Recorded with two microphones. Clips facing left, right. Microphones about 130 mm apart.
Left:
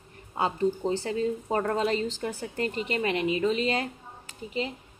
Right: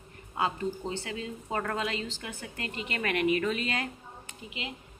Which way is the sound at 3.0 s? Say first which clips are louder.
Even; 25° left (ahead or behind).